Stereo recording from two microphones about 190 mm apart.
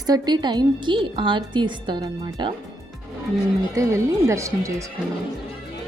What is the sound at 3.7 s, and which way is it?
Speech, 15° right (ahead or behind).